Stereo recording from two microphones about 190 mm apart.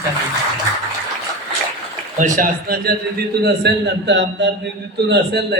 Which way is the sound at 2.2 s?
45° right (ahead or behind).